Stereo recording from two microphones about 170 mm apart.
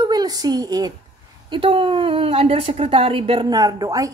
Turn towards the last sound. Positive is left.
turn(degrees=-20)  # may be behind; listen again after turning